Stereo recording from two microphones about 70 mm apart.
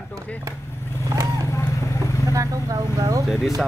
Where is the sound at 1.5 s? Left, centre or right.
Left.